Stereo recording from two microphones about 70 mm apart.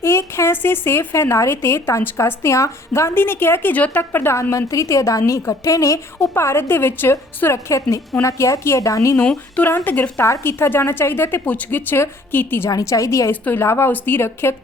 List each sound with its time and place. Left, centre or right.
0.0 s a woman's voice: left
9.2 s speech: centre
9.6 s a woman's voice: left
10.4 s speech: left
11.4 s a woman's voice: left
12.8 s a woman's voice: left
13.3 s speech: left